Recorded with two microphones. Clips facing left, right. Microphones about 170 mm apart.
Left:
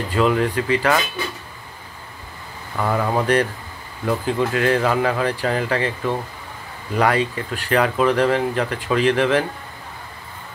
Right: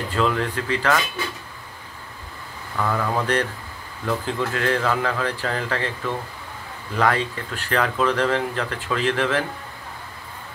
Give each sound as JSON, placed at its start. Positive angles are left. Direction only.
{"t": 0.1, "sound": "speech", "side_deg": 15}
{"t": 2.8, "sound": "speech", "side_deg": 20}